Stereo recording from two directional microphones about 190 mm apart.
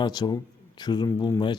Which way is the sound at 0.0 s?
20° left (ahead or behind).